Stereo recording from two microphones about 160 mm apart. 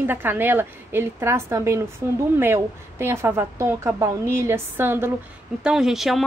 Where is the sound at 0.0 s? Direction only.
10° right (ahead or behind).